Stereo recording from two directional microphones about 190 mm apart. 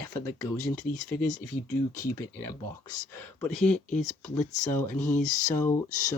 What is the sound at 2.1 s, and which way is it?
Speech, 15° left (ahead or behind).